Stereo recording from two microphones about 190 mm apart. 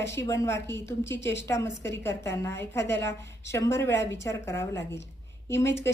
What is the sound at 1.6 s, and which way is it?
Speech, 70° left (ahead or behind).